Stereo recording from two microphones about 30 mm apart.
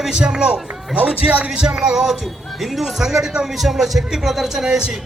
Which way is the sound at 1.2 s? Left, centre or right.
Right.